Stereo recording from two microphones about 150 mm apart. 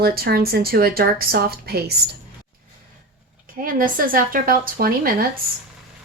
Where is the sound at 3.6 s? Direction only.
65° right (ahead or behind).